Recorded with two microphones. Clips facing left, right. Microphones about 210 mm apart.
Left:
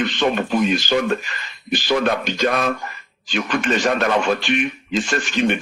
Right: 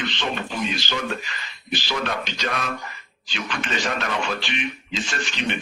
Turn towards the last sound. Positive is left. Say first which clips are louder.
# left 8 dB
turn(degrees=50)  # may be behind; listen again after turning